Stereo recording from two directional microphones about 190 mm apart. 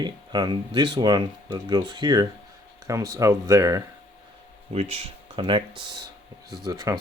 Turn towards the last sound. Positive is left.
turn(degrees=-20)  # may be behind; listen again after turning